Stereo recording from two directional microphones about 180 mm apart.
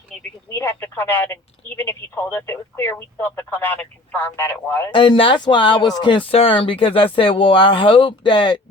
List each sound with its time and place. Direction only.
0.5 s speech: 15° left (ahead or behind)
4.9 s speech: 30° left (ahead or behind)